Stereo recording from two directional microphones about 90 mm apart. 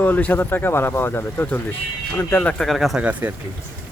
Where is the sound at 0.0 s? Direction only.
20° left (ahead or behind).